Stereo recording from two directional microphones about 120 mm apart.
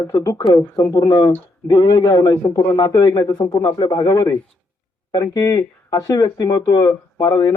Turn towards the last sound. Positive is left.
turn(degrees=30)  # may be behind; listen again after turning